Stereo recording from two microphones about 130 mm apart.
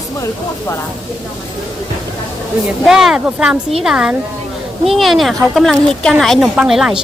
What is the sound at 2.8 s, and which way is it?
A woman's voice, centre (ahead or behind).